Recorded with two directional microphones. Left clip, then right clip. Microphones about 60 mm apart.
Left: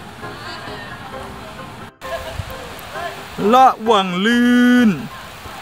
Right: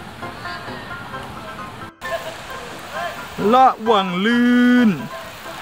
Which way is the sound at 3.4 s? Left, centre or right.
Left.